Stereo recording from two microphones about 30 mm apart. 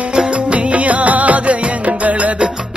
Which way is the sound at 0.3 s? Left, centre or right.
Right.